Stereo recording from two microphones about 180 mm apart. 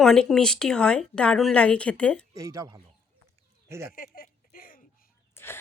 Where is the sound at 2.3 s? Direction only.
20° right (ahead or behind).